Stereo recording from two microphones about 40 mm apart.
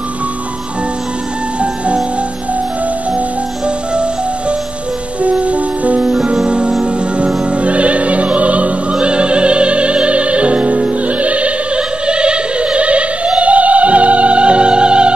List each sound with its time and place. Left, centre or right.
3.6 s music: right
7.5 s opera: right
8.9 s music: right